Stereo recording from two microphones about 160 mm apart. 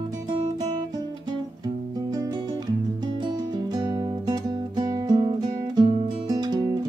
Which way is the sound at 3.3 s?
25° right (ahead or behind).